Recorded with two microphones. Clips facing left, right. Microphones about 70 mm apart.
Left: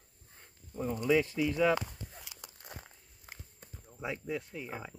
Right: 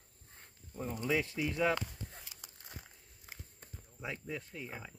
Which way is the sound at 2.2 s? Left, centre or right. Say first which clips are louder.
Left 4 dB; left.